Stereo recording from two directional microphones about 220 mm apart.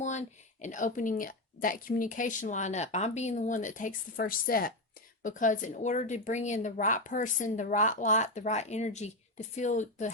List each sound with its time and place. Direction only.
0.0 s speech: 35° left (ahead or behind)